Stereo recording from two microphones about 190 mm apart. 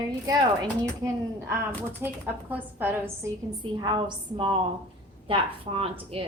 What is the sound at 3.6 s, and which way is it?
A woman's voice, 25° right (ahead or behind).